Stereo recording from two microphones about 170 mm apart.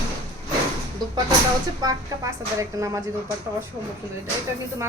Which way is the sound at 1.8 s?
20° right (ahead or behind).